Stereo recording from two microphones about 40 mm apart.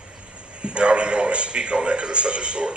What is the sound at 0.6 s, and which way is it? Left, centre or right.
A man's voice, right.